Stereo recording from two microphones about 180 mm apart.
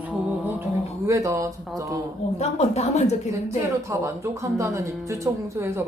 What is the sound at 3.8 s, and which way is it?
Speech, 15° right (ahead or behind).